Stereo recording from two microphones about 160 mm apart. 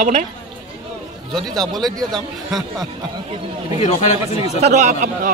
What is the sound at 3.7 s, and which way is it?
Speech, 45° left (ahead or behind).